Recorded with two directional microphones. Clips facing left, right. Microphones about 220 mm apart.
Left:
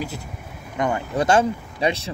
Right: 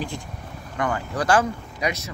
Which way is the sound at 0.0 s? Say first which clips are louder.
Left 1 dB; 5° left (ahead or behind).